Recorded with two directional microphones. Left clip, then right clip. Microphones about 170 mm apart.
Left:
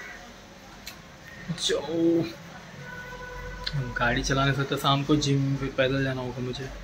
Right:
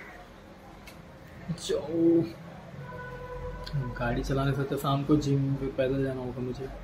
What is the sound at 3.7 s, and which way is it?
Speech, centre (ahead or behind).